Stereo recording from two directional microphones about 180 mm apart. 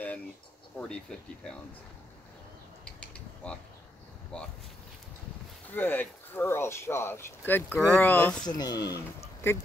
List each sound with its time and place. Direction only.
0.7 s speech: 5° left (ahead or behind)
2.8 s mechanisms: 5° left (ahead or behind)
4.3 s speech: 5° left (ahead or behind)
5.7 s speech: 10° left (ahead or behind)
8.5 s speech: 20° left (ahead or behind)